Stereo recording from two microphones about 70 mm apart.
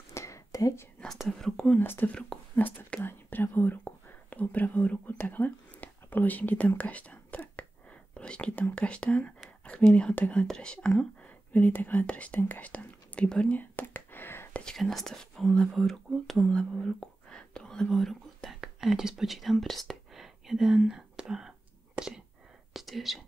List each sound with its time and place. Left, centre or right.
0.1 s whispering: left
1.0 s speech: centre
1.8 s speech: left
2.0 s speech: centre
3.0 s speech: left; by 11.1 s centre
11.5 s speech: left
13.6 s whispering: left
14.5 s speech: centre
16.3 s whispering: centre
22.7 s speech: centre